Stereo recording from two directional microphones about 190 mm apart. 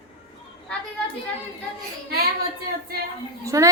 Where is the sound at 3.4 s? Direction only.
15° right (ahead or behind).